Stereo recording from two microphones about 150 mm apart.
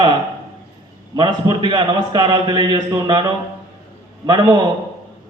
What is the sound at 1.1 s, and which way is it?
Speech, 30° right (ahead or behind).